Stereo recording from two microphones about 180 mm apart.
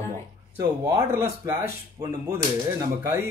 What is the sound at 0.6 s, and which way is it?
Speech, 15° right (ahead or behind).